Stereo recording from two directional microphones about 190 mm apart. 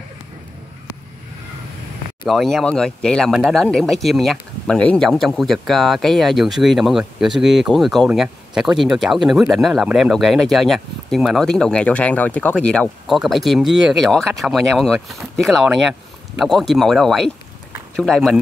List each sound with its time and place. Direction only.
2.2 s speech: centre (ahead or behind)